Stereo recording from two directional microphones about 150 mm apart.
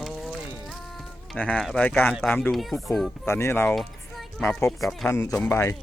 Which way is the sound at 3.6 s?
Centre (ahead or behind).